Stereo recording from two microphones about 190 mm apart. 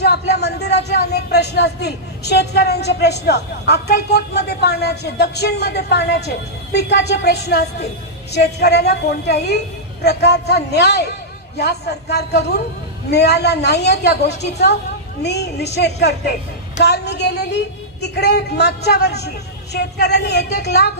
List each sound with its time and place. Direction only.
0.0 s speech: 60° left (ahead or behind)